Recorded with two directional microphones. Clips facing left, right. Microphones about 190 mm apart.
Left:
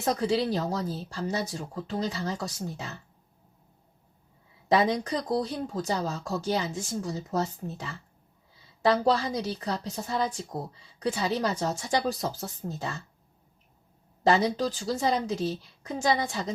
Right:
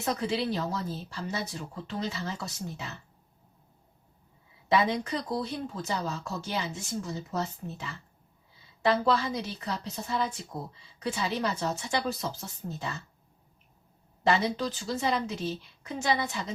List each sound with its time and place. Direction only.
0.0 s speech: 35° left (ahead or behind)
4.7 s speech: 40° left (ahead or behind)
14.3 s speech: 35° left (ahead or behind)